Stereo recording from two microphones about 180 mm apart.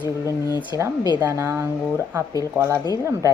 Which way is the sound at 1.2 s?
10° right (ahead or behind).